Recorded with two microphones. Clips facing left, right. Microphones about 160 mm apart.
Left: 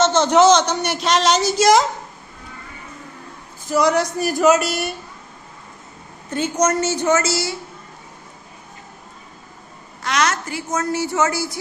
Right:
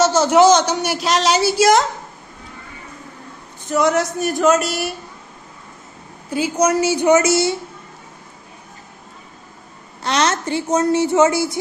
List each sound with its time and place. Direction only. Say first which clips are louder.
0.0 s a woman's voice: right 1 dB; 5° right (ahead or behind)
3.7 s speech: even; centre (ahead or behind)
6.3 s a woman's voice: right 2 dB; 10° right (ahead or behind)
10.0 s a woman's voice: right 2 dB; 30° right (ahead or behind)